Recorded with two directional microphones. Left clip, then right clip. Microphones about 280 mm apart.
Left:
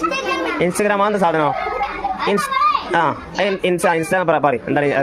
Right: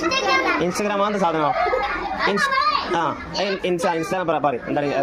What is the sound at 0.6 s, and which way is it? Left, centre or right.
Speech, left.